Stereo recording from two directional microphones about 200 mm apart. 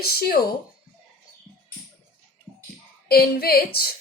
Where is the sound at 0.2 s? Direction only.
50° left (ahead or behind).